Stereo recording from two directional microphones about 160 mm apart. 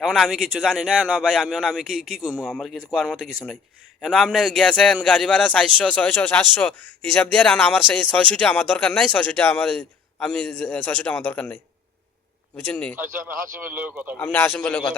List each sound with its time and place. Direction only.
0.0 s a man's voice: centre (ahead or behind)
12.6 s a man's voice: 10° left (ahead or behind)
13.1 s speech: 60° right (ahead or behind)
13.6 s speech: 10° right (ahead or behind)
14.2 s a man's voice: 10° left (ahead or behind)